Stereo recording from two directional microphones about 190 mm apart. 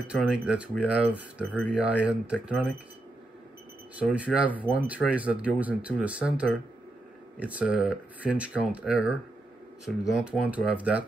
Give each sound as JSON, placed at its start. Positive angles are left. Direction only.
{"t": 0.3, "sound": "speech", "side_deg": -5}
{"t": 3.9, "sound": "speech", "side_deg": -5}